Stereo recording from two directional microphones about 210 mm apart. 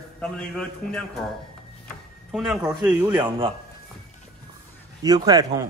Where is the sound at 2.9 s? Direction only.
10° right (ahead or behind).